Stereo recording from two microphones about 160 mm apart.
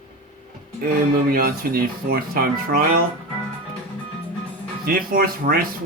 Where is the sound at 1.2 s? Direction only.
65° right (ahead or behind).